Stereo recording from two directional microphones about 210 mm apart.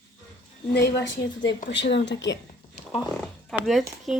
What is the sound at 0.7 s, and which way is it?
A woman's voice, 50° left (ahead or behind).